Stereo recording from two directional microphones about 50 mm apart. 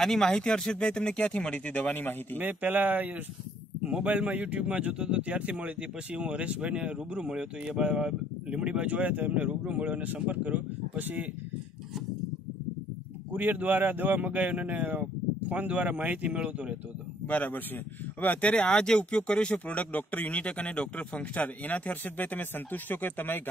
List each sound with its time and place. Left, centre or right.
0.0 s speech: centre; by 2.1 s left
2.4 s speech: right
3.8 s speech: right
13.3 s speech: right
16.3 s speech: centre
17.3 s speech: left; by 19.5 s centre
19.5 s speech: left